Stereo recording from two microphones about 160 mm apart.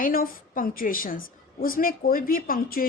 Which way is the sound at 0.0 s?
60° left (ahead or behind).